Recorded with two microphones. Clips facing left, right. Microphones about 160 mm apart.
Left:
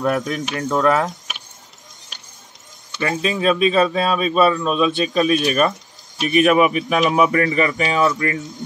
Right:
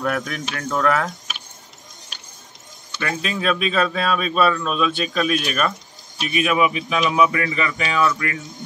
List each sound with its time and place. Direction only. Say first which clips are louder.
0.0 s speech: left 4 dB; 25° left (ahead or behind)
3.0 s speech: left 5 dB; 30° left (ahead or behind)
6.2 s a man's voice: left 5 dB; 45° left (ahead or behind); by 8.4 s 30° left (ahead or behind)